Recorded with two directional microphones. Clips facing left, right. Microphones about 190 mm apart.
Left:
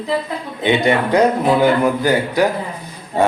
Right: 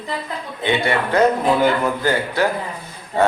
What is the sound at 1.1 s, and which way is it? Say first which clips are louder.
Speech: even; 15° left (ahead or behind).